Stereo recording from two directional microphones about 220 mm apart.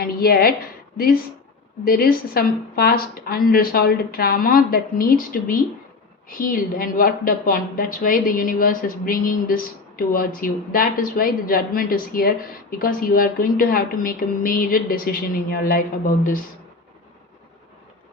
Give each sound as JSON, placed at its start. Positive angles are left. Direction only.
{"t": 0.0, "sound": "a woman's voice", "side_deg": 45}